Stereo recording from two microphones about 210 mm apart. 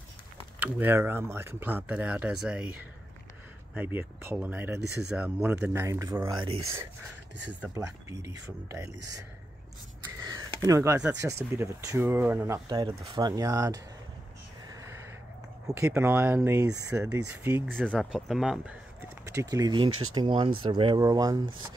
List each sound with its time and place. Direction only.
0.6 s speech: 10° right (ahead or behind)
10.2 s speech: 15° right (ahead or behind)
15.6 s speech: 15° right (ahead or behind)
17.6 s speech: 5° left (ahead or behind); by 19.9 s 20° right (ahead or behind)
19.9 s speech: 80° right
20.2 s speech: 25° right (ahead or behind)